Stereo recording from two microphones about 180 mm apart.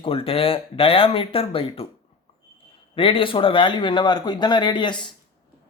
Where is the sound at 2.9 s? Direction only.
30° left (ahead or behind).